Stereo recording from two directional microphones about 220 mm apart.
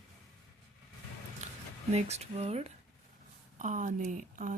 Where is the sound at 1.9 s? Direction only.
30° right (ahead or behind).